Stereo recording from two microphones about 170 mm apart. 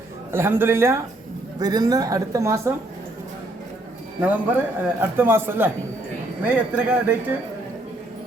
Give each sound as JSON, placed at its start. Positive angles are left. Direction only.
{"t": 0.3, "sound": "a man's voice", "side_deg": -15}
{"t": 4.2, "sound": "a man's voice", "side_deg": -10}